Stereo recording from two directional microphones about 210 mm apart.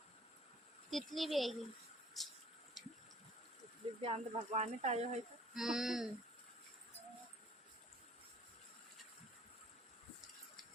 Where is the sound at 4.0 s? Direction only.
30° right (ahead or behind).